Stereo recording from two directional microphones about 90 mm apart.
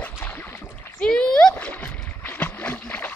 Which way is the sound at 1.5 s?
15° left (ahead or behind).